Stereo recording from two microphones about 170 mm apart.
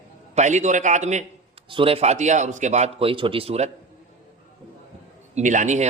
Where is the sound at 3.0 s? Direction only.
30° right (ahead or behind).